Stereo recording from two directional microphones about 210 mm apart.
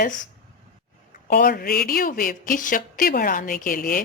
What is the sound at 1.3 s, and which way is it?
Speech, 40° left (ahead or behind).